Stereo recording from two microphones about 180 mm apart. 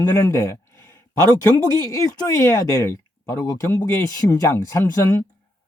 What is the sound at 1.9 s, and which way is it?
Speech, 15° left (ahead or behind).